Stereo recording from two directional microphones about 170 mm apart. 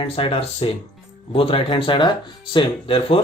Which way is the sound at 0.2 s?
30° left (ahead or behind).